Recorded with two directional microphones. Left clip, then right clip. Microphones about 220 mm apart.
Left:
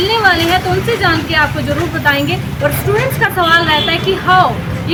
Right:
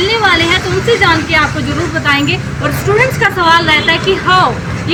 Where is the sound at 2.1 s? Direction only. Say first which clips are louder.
Right 1 dB; 15° left (ahead or behind).